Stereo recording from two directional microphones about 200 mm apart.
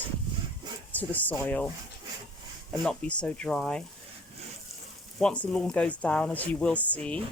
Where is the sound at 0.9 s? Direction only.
10° left (ahead or behind).